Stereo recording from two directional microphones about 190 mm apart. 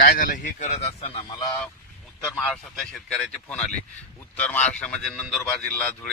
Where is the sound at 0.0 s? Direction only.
50° left (ahead or behind).